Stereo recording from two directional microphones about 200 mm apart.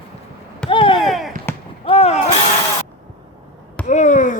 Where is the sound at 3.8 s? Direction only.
40° left (ahead or behind).